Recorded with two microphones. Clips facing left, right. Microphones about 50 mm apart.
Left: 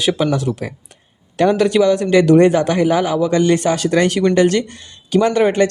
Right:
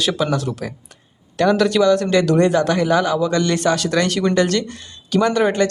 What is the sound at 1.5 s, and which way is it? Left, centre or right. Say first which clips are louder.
Speech: left 1 dB; centre.